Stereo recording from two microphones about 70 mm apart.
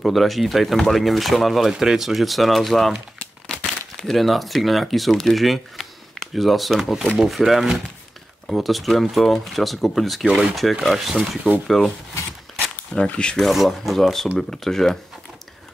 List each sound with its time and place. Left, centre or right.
0.0 s speech: centre
11.1 s speech: centre
11.6 s speech: centre
12.9 s speech: centre
13.5 s speech: centre